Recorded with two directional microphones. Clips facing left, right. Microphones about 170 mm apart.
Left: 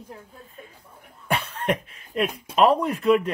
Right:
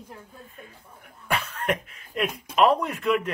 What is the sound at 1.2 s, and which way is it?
Speech, 30° left (ahead or behind).